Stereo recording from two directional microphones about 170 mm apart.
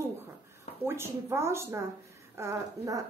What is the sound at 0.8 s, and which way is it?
A woman's voice, 15° right (ahead or behind).